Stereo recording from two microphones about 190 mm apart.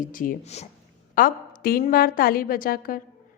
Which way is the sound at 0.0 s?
45° left (ahead or behind).